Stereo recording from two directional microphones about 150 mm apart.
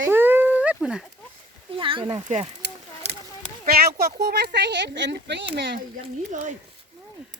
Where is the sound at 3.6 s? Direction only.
90° right.